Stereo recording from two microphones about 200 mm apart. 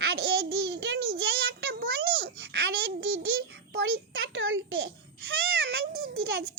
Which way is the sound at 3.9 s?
70° right (ahead or behind).